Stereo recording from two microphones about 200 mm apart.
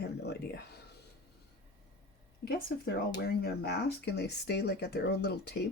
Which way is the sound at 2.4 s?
50° left (ahead or behind).